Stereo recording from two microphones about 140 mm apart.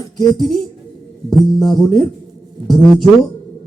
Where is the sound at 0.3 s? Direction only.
Centre (ahead or behind).